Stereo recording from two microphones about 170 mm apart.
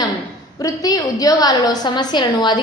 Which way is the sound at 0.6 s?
20° left (ahead or behind).